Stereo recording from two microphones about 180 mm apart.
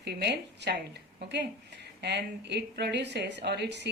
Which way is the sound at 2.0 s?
70° right (ahead or behind).